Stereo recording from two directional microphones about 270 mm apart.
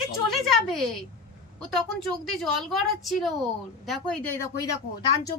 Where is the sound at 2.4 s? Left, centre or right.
Centre.